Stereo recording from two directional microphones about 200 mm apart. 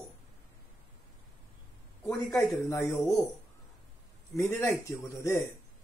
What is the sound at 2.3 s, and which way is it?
Speech, 10° left (ahead or behind).